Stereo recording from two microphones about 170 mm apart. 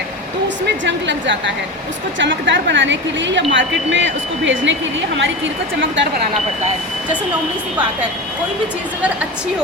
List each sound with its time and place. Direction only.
0.4 s speech: 90° right